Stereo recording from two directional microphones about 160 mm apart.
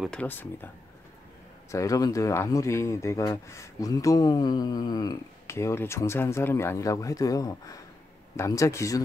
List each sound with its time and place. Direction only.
0.0 s speech: 5° left (ahead or behind)
1.7 s speech: 20° left (ahead or behind)